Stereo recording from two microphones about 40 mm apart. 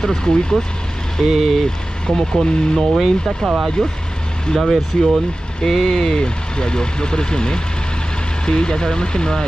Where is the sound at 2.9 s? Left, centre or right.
Centre.